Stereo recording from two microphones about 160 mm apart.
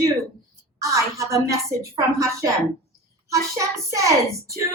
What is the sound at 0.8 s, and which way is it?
Speech, 20° right (ahead or behind).